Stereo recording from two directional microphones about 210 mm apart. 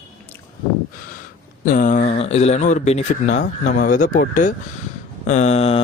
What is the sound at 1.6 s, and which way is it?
Speech, 40° left (ahead or behind).